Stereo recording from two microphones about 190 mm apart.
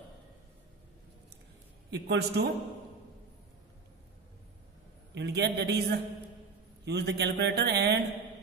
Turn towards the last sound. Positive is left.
turn(degrees=-60)  # may be behind; listen again after turning